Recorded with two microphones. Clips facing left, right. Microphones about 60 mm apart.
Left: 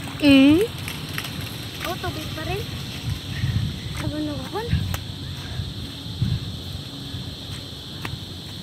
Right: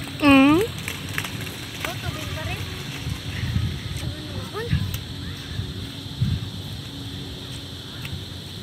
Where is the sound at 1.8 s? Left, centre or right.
Centre.